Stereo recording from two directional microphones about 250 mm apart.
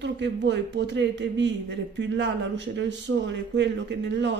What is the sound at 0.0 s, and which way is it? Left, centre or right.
A man's voice, right.